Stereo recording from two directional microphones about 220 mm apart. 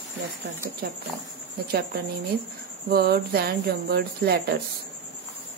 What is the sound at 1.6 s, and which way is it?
Speech, 45° right (ahead or behind).